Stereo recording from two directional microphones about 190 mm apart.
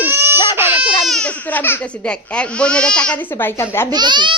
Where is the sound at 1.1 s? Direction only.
5° left (ahead or behind).